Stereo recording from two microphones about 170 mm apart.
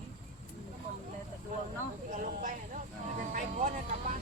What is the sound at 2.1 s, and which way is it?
Speech, 50° right (ahead or behind).